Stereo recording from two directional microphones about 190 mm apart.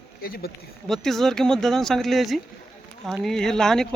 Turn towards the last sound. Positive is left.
turn(degrees=5)  # may be behind; listen again after turning